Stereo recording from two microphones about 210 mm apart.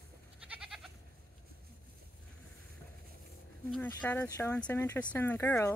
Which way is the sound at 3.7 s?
10° left (ahead or behind).